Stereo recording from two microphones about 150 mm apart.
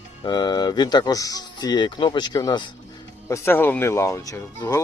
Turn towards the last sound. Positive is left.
turn(degrees=20)  # may be behind; listen again after turning